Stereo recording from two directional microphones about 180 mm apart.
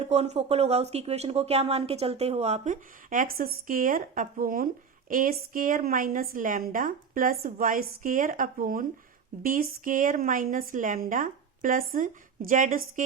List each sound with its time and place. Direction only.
0.0 s speech: 35° right (ahead or behind)